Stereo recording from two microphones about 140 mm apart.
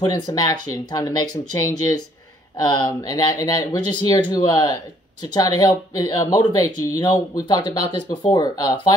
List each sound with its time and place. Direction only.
0.0 s speech: 30° left (ahead or behind)
2.5 s speech: 30° left (ahead or behind)